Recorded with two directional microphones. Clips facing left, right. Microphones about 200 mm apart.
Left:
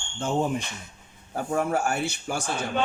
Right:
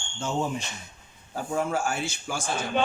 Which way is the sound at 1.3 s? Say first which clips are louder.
Left 2 dB; 60° left (ahead or behind).